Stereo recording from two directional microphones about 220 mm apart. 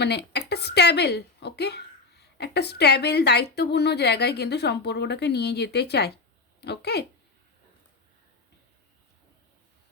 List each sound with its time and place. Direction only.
0.0 s a woman's voice: 50° left (ahead or behind)